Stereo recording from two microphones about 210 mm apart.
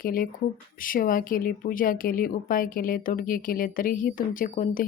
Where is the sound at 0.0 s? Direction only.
40° left (ahead or behind).